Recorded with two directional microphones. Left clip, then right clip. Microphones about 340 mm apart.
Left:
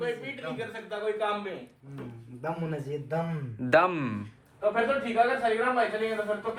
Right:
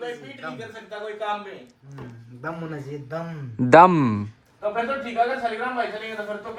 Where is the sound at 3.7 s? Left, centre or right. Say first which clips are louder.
Right 10 dB; centre.